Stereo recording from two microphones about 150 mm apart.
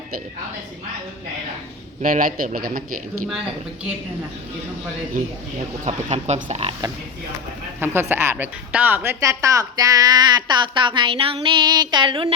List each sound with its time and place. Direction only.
2.0 s a man's voice: 65° right (ahead or behind)
3.2 s speech: 5° right (ahead or behind)
5.9 s speech: 50° right (ahead or behind)
7.8 s a woman's voice: 15° right (ahead or behind); by 12.3 s 35° right (ahead or behind)